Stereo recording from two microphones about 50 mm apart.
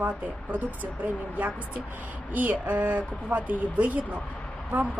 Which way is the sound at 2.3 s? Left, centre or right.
Right.